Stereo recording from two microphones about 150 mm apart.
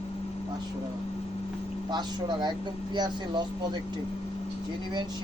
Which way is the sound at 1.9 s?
30° right (ahead or behind).